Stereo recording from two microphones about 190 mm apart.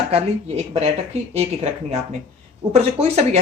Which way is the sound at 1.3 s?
35° right (ahead or behind).